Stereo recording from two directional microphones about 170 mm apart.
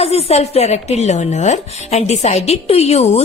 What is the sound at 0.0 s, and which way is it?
Speech, 35° left (ahead or behind).